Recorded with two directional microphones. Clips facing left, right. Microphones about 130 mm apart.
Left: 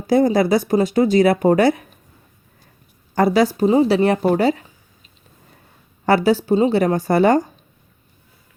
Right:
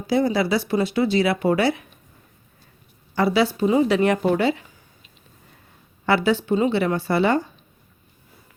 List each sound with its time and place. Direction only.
0.1 s speech: 45° left (ahead or behind)
3.2 s a woman's voice: 45° left (ahead or behind)
6.1 s a woman's voice: 40° left (ahead or behind)